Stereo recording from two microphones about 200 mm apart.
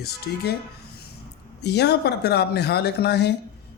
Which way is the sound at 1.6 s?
55° left (ahead or behind).